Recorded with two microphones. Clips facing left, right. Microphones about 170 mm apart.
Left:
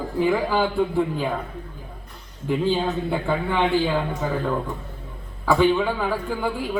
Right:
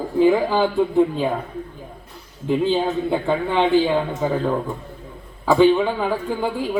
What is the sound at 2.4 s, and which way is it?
A man's voice, 20° right (ahead or behind).